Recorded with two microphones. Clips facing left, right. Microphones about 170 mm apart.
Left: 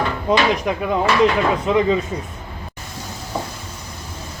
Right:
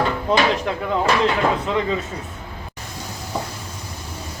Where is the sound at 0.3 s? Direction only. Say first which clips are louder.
Left 3 dB; 10° left (ahead or behind).